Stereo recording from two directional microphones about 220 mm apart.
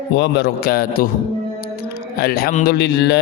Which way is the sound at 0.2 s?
45° left (ahead or behind).